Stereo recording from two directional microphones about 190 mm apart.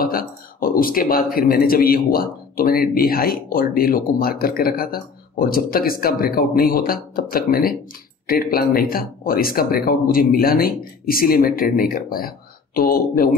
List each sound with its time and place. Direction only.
0.0 s speech: 50° left (ahead or behind)